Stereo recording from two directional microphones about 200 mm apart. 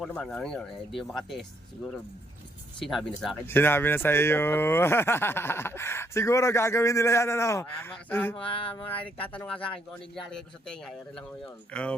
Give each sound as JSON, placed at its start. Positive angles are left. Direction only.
{"t": 0.0, "sound": "speech", "side_deg": 5}